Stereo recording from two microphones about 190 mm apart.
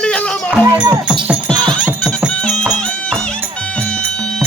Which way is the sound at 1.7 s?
5° left (ahead or behind).